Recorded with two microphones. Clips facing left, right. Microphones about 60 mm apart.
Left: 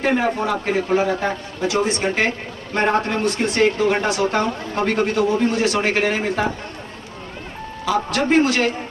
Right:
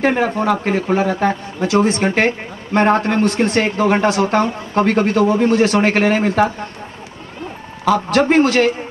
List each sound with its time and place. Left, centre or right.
0.0 s speech: right
7.8 s speech: right